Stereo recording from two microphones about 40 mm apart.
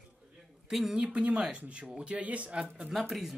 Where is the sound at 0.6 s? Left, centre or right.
Centre.